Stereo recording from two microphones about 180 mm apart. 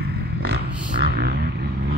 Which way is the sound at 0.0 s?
60° right (ahead or behind).